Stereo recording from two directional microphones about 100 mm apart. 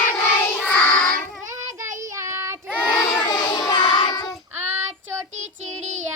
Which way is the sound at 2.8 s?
10° left (ahead or behind).